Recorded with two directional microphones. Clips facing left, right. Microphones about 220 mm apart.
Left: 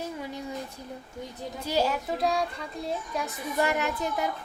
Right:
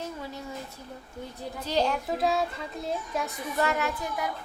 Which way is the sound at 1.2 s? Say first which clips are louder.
Even; 10° left (ahead or behind).